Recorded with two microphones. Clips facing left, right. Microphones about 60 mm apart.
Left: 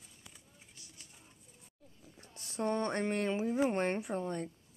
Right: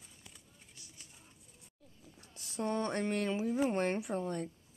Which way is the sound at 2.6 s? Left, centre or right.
Left.